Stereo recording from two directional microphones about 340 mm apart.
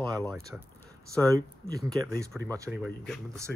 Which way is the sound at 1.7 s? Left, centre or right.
Centre.